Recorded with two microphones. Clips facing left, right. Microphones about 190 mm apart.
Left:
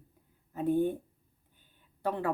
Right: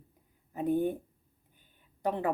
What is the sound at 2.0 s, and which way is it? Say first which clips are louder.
Speech: right 1 dB; 20° right (ahead or behind).